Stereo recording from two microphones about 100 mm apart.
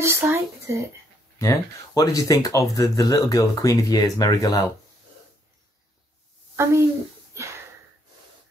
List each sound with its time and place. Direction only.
0.0 s a sound: 25° right (ahead or behind)
1.4 s speech: 35° left (ahead or behind)
6.5 s a woman's voice: 25° right (ahead or behind)